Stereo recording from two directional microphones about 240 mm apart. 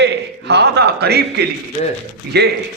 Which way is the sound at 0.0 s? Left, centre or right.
Right.